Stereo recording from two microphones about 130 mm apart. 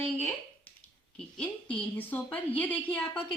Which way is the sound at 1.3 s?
10° left (ahead or behind).